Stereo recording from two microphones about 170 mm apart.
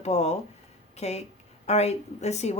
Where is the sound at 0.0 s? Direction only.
40° left (ahead or behind).